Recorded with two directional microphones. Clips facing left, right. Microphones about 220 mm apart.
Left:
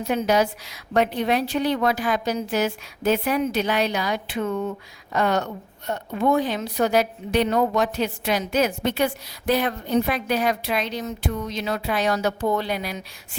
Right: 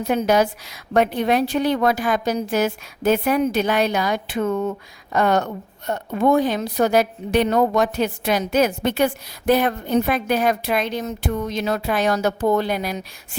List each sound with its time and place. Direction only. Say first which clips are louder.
0.1 s a woman's voice: right 3 dB; 50° right (ahead or behind)